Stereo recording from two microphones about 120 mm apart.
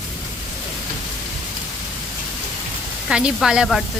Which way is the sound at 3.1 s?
5° right (ahead or behind).